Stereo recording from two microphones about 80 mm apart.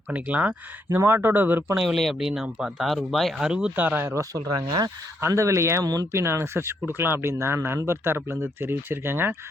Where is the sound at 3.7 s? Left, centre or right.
Right.